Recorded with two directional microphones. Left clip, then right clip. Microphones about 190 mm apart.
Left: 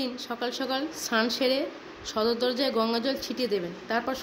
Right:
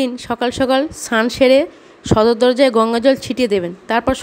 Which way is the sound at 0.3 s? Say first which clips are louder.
Right 15 dB; 50° right (ahead or behind).